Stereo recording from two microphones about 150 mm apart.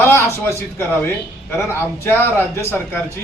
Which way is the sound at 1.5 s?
15° left (ahead or behind).